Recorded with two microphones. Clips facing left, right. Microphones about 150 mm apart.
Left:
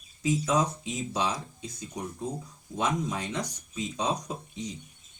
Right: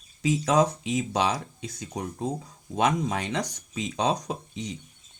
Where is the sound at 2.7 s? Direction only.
75° right (ahead or behind).